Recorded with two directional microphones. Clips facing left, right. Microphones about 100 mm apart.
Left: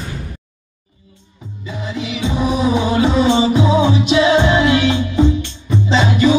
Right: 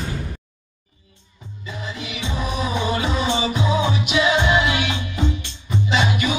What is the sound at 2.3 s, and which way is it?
Music, 20° left (ahead or behind).